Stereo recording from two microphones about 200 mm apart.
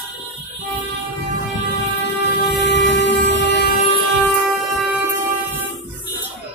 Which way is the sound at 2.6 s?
60° left (ahead or behind).